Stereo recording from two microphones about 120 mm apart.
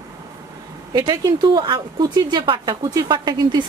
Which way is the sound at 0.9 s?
35° right (ahead or behind).